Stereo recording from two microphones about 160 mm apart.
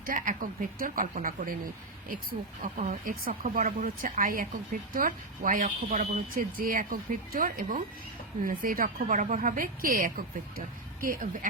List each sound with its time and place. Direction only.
0.0 s speech: 55° right (ahead or behind)
2.8 s speech: 60° right (ahead or behind)